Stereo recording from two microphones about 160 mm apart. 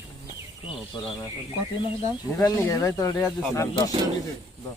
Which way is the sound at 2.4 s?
20° left (ahead or behind).